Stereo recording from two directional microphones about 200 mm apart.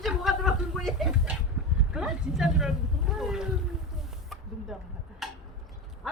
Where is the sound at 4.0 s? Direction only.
Centre (ahead or behind).